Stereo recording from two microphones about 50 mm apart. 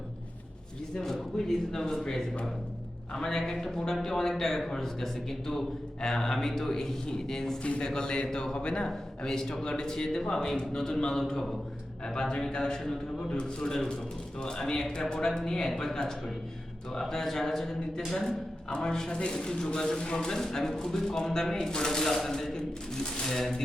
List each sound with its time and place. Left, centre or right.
0.9 s a man's voice: centre
7.6 s a man's voice: left; by 23.6 s centre